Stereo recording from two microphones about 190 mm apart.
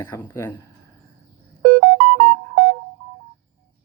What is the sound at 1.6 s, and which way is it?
Music, 55° right (ahead or behind).